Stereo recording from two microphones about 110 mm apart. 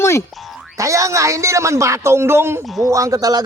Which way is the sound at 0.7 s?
30° right (ahead or behind).